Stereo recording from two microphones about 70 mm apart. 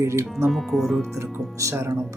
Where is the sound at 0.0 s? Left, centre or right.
Right.